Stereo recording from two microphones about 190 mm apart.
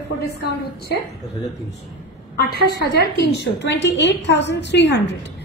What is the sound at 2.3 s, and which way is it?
A woman's voice, 55° left (ahead or behind).